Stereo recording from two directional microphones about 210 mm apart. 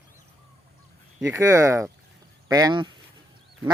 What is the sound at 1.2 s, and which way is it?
Speech, 15° right (ahead or behind).